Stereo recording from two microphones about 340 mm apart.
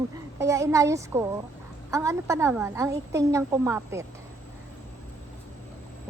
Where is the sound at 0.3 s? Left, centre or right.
Centre.